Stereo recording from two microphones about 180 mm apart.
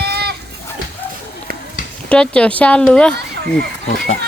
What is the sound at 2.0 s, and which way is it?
Speech, 5° left (ahead or behind).